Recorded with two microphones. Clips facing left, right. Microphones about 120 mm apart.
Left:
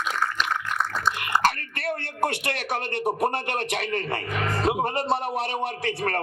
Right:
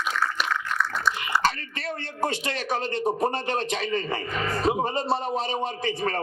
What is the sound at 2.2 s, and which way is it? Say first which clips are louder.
A man's voice: right 1 dB; 60° left (ahead or behind).